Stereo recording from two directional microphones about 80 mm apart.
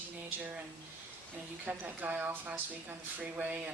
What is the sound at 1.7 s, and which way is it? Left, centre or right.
Speech, centre.